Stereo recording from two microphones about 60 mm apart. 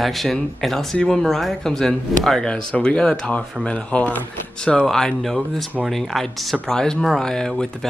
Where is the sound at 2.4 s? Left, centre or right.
Centre.